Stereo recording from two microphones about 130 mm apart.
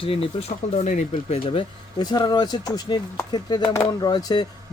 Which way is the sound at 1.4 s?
40° left (ahead or behind).